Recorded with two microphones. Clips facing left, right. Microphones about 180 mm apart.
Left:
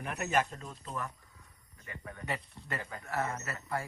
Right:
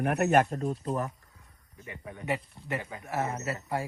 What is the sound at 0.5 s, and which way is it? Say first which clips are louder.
Speech: right 11 dB; 40° right (ahead or behind).